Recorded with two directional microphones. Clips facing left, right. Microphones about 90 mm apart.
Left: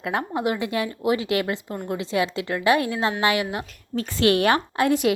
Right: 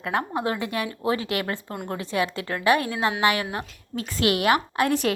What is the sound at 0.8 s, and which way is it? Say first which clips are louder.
Speech: left 2 dB; 35° right (ahead or behind).